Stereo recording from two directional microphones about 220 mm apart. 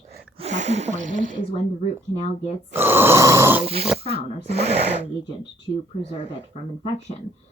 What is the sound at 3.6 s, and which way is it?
Speech, 25° right (ahead or behind).